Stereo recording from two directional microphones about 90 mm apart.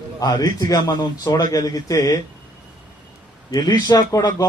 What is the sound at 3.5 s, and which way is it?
Speech, 50° left (ahead or behind).